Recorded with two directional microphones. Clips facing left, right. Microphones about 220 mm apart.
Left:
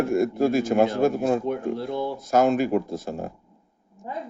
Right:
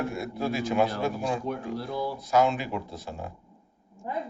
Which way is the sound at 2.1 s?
45° left (ahead or behind).